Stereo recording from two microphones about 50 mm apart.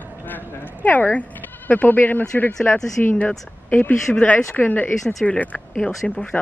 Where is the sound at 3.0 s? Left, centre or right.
Left.